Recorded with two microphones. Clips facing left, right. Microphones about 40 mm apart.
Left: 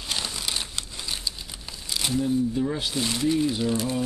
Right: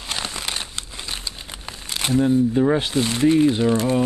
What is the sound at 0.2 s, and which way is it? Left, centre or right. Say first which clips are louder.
Crumpling: right 3 dB; right.